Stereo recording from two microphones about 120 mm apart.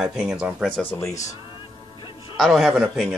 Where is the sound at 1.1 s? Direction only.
25° left (ahead or behind).